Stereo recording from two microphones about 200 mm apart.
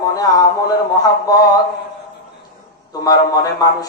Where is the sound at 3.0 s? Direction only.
20° left (ahead or behind).